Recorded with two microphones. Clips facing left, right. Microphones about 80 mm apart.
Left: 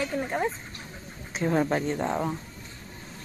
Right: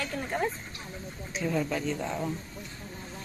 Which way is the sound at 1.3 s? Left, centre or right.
Left.